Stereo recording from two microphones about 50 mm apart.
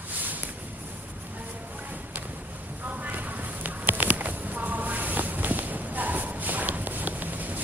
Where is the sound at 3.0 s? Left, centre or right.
Right.